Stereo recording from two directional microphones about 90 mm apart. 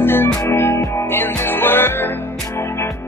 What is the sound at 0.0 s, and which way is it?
Music, 25° left (ahead or behind).